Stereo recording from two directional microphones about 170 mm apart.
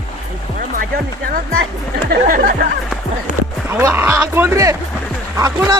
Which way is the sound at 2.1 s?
55° right (ahead or behind).